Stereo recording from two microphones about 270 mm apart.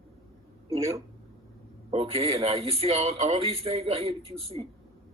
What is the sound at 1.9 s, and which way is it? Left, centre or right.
Speech, right.